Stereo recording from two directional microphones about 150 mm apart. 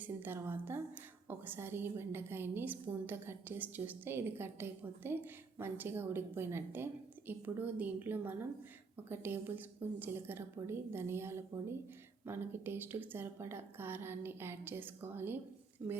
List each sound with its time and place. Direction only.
0.0 s a woman's voice: 15° right (ahead or behind)